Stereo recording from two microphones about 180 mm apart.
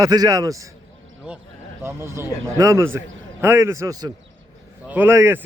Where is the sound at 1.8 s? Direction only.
15° right (ahead or behind).